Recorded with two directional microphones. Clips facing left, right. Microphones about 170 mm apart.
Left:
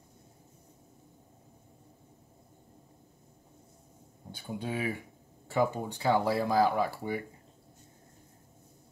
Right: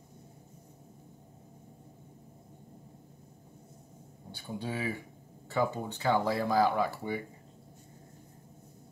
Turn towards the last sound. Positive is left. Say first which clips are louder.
# even
turn(degrees=10)  # may be behind; listen again after turning